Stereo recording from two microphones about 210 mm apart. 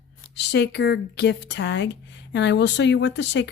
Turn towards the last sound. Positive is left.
turn(degrees=55)  # may be behind; listen again after turning